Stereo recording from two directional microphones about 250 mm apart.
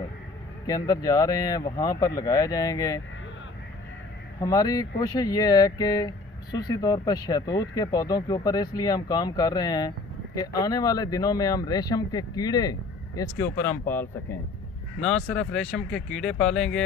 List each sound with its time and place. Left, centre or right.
0.7 s speech: centre
4.4 s speech: centre